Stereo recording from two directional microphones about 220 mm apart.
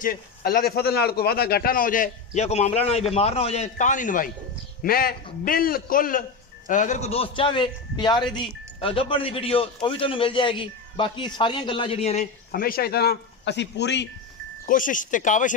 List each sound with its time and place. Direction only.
0.0 s a man's voice: 40° left (ahead or behind)
14.7 s a man's voice: 35° left (ahead or behind)